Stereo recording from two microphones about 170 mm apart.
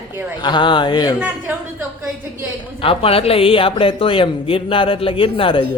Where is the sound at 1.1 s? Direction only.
10° right (ahead or behind).